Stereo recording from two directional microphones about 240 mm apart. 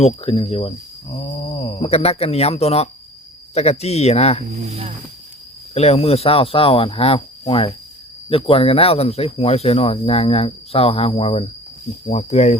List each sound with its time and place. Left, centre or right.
0.0 s speech: left
4.6 s chopping: right
5.7 s speech: left